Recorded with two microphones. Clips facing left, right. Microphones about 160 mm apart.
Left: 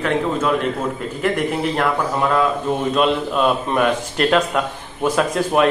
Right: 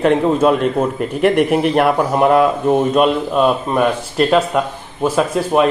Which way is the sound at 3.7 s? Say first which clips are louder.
Right 2 dB; 5° right (ahead or behind).